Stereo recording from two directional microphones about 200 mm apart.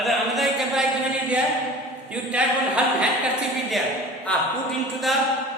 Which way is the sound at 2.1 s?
5° right (ahead or behind).